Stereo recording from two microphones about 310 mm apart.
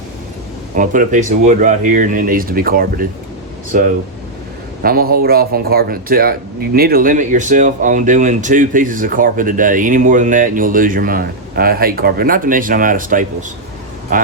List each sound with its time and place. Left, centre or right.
0.8 s speech: right